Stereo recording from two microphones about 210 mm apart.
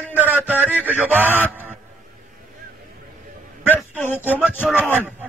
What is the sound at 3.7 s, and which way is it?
Speech, 10° left (ahead or behind).